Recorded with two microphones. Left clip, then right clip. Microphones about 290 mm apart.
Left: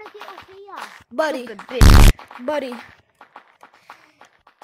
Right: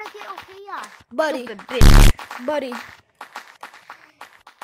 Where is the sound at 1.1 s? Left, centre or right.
Centre.